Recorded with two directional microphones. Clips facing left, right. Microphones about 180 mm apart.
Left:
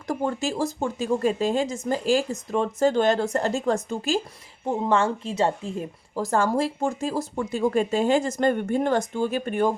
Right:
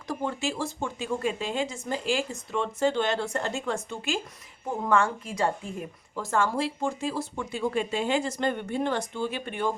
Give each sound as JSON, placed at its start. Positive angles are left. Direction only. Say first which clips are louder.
{"t": 0.1, "sound": "speech", "louder": "left 4 dB", "side_deg": 45}
{"t": 4.6, "sound": "a woman's voice", "louder": "left 3 dB", "side_deg": 25}